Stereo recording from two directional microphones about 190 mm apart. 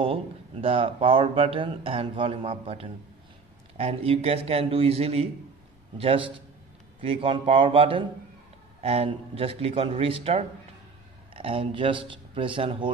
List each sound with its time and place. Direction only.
0.0 s speech: 30° right (ahead or behind)